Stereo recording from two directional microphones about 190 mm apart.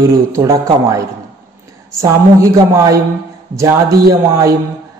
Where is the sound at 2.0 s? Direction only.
15° right (ahead or behind).